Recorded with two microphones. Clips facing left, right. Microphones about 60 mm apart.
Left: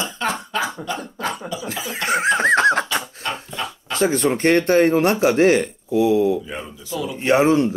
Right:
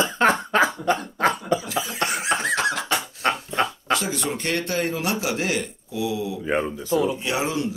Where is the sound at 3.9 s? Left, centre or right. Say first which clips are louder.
Left 11 dB; left.